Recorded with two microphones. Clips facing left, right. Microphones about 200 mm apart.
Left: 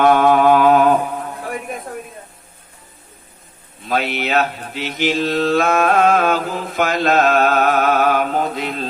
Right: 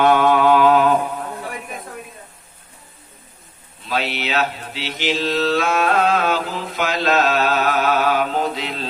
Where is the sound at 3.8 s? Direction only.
50° left (ahead or behind).